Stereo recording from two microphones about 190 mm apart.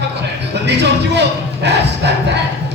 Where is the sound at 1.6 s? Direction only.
65° right (ahead or behind).